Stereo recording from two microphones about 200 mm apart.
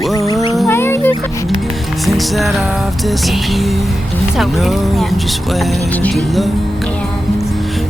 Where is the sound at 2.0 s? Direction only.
Centre (ahead or behind).